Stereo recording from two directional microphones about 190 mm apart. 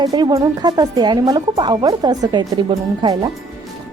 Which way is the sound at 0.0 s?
20° right (ahead or behind).